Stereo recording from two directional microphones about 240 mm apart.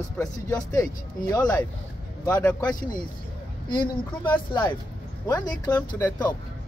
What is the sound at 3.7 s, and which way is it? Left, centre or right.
Speech, centre.